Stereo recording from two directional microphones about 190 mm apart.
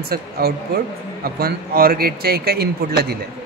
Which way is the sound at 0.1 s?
50° right (ahead or behind).